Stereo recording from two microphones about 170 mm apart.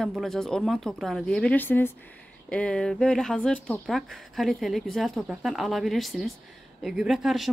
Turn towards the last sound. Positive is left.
turn(degrees=0)  # may be behind; listen again after turning